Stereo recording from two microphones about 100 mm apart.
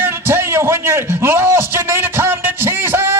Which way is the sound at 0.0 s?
25° right (ahead or behind).